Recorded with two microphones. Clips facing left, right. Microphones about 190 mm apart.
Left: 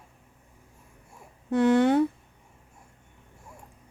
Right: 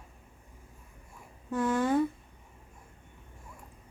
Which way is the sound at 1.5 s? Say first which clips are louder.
Left 7 dB; 75° left (ahead or behind).